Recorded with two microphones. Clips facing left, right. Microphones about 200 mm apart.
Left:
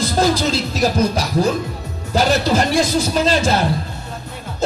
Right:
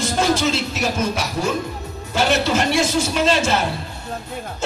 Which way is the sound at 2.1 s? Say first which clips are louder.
Left 3 dB; 35° left (ahead or behind).